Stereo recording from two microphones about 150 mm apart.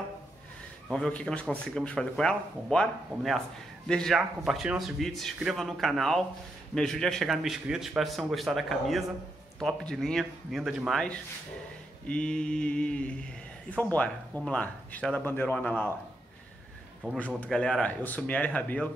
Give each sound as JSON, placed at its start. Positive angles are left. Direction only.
{"t": 0.8, "sound": "speech", "side_deg": 5}
{"t": 17.0, "sound": "speech", "side_deg": 5}